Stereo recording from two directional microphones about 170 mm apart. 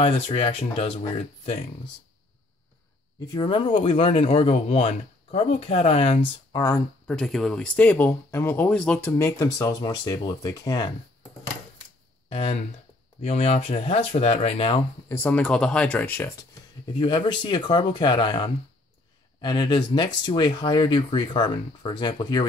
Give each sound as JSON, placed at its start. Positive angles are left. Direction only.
{"t": 0.0, "sound": "speech", "side_deg": 35}
{"t": 3.3, "sound": "speech", "side_deg": 30}
{"t": 7.1, "sound": "speech", "side_deg": 5}
{"t": 9.1, "sound": "speech", "side_deg": 20}
{"t": 12.3, "sound": "speech", "side_deg": 35}
{"t": 15.0, "sound": "speech", "side_deg": 10}
{"t": 16.8, "sound": "speech", "side_deg": 30}